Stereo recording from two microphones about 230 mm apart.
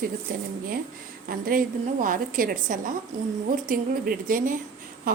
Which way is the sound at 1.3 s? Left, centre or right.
Right.